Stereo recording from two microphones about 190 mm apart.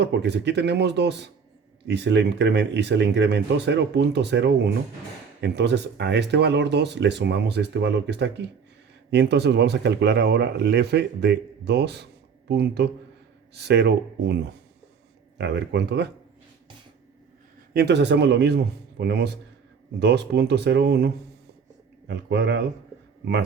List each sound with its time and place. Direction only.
0.0 s speech: 65° right (ahead or behind)
17.7 s speech: 65° right (ahead or behind)